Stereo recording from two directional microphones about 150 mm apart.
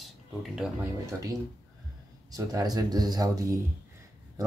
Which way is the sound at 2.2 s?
25° right (ahead or behind).